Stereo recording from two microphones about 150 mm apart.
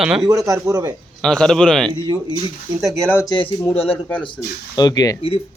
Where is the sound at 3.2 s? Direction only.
30° left (ahead or behind).